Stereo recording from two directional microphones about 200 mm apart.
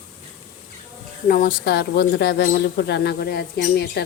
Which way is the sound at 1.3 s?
45° left (ahead or behind).